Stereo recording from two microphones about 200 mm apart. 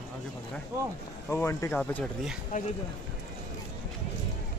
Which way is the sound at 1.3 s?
15° left (ahead or behind).